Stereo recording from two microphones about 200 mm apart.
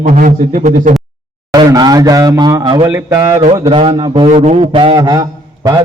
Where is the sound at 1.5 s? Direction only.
20° right (ahead or behind).